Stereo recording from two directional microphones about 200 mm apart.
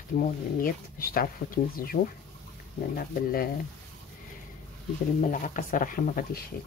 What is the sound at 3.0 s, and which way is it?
Speech, 45° left (ahead or behind).